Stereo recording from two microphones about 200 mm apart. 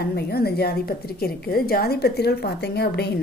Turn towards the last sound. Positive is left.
turn(degrees=55)  # may be behind; listen again after turning